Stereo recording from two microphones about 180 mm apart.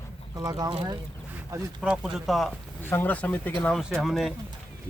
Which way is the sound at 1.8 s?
5° right (ahead or behind).